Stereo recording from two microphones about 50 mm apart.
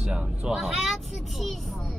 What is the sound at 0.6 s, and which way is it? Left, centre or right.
A child's voice, centre.